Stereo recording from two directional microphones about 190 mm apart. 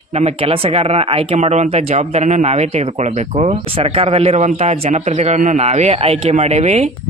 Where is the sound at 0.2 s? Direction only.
30° right (ahead or behind).